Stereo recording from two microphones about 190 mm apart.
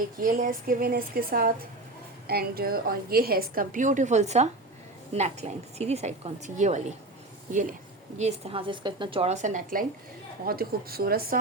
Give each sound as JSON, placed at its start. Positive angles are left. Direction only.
{"t": 0.2, "sound": "a woman's voice", "side_deg": -45}
{"t": 8.2, "sound": "a woman's voice", "side_deg": -30}